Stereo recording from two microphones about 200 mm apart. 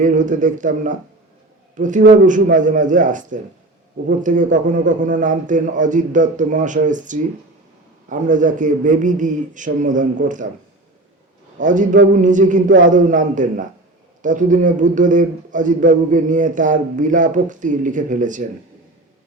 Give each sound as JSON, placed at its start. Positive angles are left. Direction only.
{"t": 0.0, "sound": "a man's voice", "side_deg": -40}
{"t": 11.6, "sound": "a man's voice", "side_deg": -40}